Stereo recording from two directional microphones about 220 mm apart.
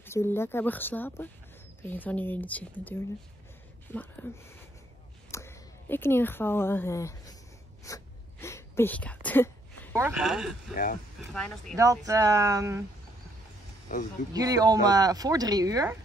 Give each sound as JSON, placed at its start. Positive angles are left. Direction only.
{"t": 0.0, "sound": "speech", "side_deg": 10}
{"t": 5.3, "sound": "a woman's voice", "side_deg": 10}
{"t": 7.8, "sound": "a sound", "side_deg": 15}
{"t": 9.9, "sound": "speech", "side_deg": -5}
{"t": 10.7, "sound": "speech", "side_deg": 40}
{"t": 11.3, "sound": "speech", "side_deg": 5}
{"t": 11.7, "sound": "speech", "side_deg": -15}
{"t": 14.3, "sound": "speech", "side_deg": -15}